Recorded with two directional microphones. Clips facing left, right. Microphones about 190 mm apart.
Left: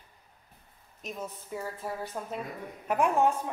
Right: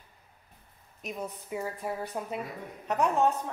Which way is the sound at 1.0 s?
10° right (ahead or behind).